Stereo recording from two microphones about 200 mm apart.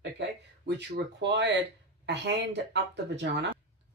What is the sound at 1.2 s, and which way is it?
Speech, 60° right (ahead or behind).